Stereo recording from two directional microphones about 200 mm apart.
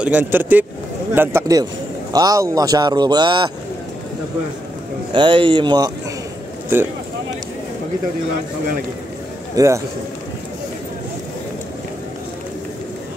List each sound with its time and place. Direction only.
0.0 s speech: 10° right (ahead or behind)
5.1 s speech: 25° right (ahead or behind)
6.7 s speech: 10° right (ahead or behind)
9.6 s speech: 15° right (ahead or behind)